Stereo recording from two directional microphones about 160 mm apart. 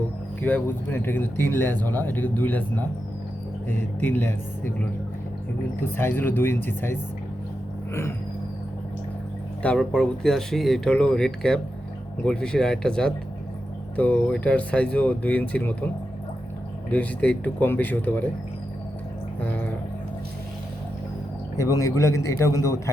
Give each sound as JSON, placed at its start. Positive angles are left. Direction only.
{"t": 0.4, "sound": "speech", "side_deg": 10}
{"t": 4.0, "sound": "speech", "side_deg": 10}
{"t": 9.6, "sound": "speech", "side_deg": 5}
{"t": 16.9, "sound": "speech", "side_deg": 10}
{"t": 19.4, "sound": "speech", "side_deg": 10}
{"t": 21.6, "sound": "a man's voice", "side_deg": 20}